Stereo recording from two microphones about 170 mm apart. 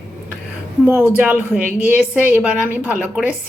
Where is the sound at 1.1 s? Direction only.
5° right (ahead or behind).